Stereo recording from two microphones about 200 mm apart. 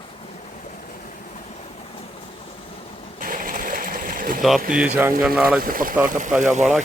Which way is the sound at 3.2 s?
45° right (ahead or behind).